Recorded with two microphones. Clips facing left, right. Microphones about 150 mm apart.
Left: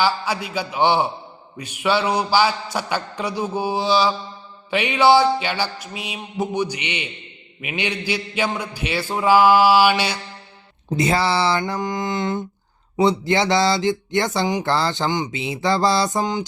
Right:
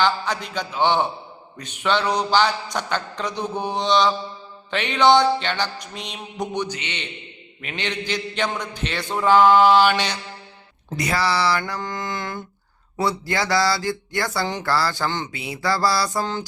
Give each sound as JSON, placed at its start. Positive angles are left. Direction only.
{"t": 0.0, "sound": "a man's voice", "side_deg": 10}
{"t": 10.8, "sound": "speech", "side_deg": 25}